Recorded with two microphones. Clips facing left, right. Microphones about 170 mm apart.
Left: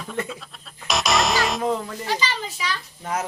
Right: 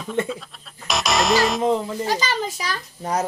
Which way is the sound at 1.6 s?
20° right (ahead or behind).